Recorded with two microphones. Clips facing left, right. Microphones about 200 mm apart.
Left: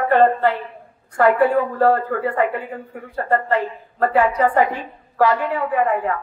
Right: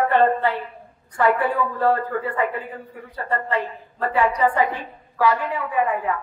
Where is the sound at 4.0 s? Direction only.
40° left (ahead or behind).